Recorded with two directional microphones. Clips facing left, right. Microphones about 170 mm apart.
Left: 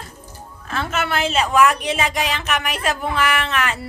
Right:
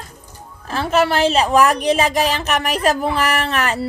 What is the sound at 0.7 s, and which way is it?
Speech, 35° right (ahead or behind).